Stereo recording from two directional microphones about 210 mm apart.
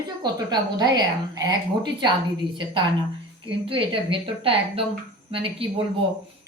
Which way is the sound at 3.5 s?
25° right (ahead or behind).